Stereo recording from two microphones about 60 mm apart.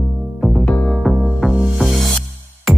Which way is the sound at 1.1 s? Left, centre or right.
Centre.